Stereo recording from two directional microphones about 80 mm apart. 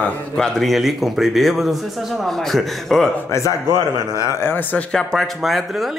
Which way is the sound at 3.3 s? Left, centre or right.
Left.